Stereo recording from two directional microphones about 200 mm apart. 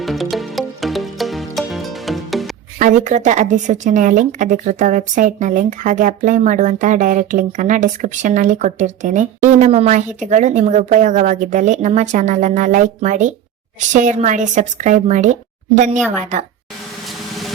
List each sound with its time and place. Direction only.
0.0 s music: centre (ahead or behind)
2.7 s speech: 40° right (ahead or behind)